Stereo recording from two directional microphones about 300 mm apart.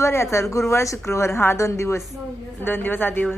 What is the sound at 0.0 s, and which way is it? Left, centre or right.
Speech, centre.